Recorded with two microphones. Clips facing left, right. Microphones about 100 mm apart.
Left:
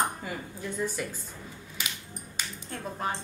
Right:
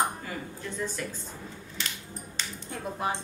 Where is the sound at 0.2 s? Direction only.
10° left (ahead or behind).